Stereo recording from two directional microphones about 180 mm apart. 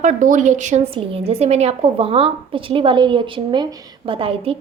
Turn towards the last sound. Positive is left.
turn(degrees=-30)  # may be behind; listen again after turning